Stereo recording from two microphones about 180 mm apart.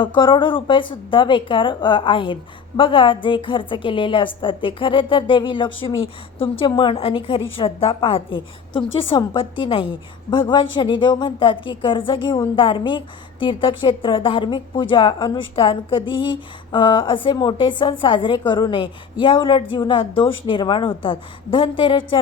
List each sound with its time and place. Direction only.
0.0 s a woman's voice: 25° left (ahead or behind)